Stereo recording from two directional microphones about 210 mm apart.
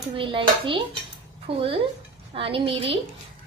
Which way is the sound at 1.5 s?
55° right (ahead or behind).